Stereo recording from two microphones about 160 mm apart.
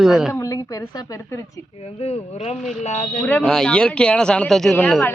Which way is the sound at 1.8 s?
40° left (ahead or behind).